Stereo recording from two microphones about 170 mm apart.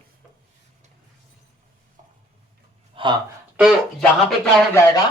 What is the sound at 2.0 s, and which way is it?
Stir, 45° right (ahead or behind).